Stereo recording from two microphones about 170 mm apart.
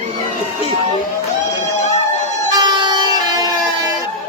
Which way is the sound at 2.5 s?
25° right (ahead or behind).